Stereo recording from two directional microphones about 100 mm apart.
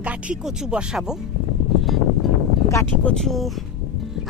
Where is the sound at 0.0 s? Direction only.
15° right (ahead or behind).